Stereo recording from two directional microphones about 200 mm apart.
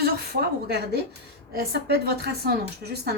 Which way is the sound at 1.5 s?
50° right (ahead or behind).